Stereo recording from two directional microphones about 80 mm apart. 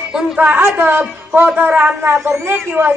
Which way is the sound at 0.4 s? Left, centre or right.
Right.